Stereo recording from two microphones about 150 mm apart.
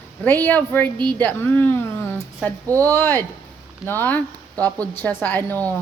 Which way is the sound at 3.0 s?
15° left (ahead or behind).